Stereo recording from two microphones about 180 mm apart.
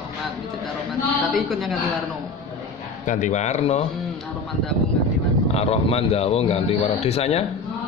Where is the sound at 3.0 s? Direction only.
45° left (ahead or behind).